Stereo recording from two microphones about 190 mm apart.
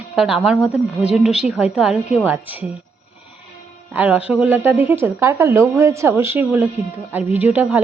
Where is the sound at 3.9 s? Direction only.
10° right (ahead or behind).